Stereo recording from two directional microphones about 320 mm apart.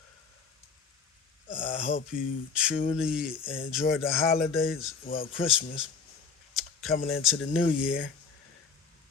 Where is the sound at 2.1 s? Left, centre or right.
Centre.